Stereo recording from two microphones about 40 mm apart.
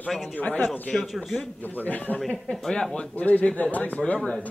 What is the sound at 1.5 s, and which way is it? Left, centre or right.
Speech, left.